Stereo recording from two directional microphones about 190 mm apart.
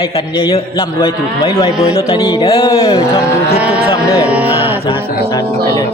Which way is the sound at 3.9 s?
15° left (ahead or behind).